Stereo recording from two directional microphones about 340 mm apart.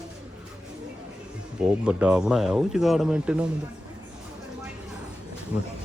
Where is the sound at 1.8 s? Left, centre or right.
Centre.